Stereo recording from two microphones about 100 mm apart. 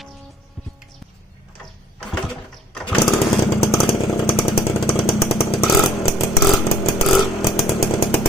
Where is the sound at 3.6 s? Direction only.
80° left.